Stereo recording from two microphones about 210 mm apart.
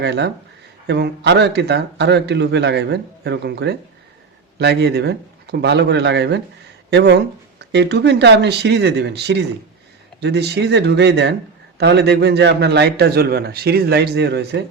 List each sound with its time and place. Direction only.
0.0 s a man's voice: 55° right (ahead or behind)